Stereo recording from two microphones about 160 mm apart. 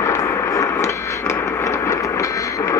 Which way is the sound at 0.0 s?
20° left (ahead or behind).